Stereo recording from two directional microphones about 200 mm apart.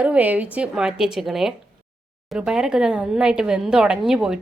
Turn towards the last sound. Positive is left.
turn(degrees=-5)  # may be behind; listen again after turning